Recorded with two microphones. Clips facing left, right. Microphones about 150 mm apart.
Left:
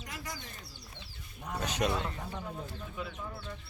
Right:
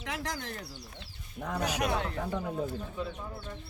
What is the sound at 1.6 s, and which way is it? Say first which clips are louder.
Speech: even; 10° right (ahead or behind).